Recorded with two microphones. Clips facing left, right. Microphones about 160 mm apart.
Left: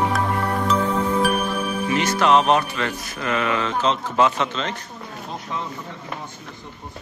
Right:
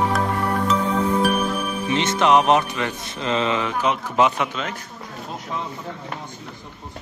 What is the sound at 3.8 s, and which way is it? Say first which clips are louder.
Speech: even; 15° right (ahead or behind).